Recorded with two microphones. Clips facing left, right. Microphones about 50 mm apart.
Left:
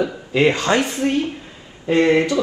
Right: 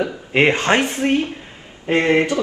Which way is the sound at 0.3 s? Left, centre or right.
Right.